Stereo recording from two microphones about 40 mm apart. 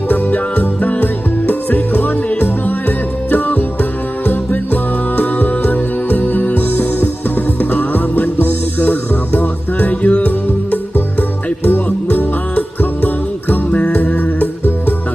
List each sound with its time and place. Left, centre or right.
0.1 s music: left
13.7 s music: left
13.9 s music: left